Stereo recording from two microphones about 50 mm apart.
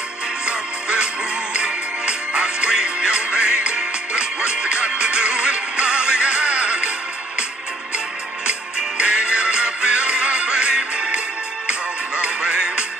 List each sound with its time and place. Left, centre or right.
0.5 s music: centre
8.5 s music: centre
12.2 s music: centre